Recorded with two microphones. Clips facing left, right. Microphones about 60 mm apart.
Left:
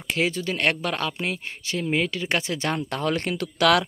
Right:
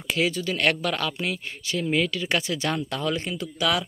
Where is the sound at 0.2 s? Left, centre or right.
Left.